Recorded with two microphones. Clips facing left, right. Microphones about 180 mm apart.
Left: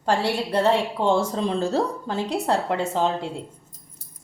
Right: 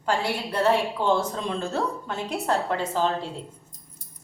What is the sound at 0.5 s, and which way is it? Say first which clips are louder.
A woman's voice: left 1 dB; 25° left (ahead or behind).